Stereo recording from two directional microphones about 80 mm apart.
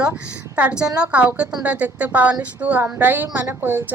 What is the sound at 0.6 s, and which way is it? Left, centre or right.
A woman's voice, centre.